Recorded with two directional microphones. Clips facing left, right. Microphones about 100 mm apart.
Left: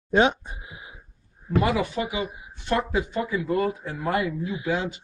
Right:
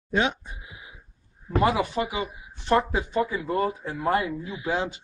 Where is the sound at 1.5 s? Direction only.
35° right (ahead or behind).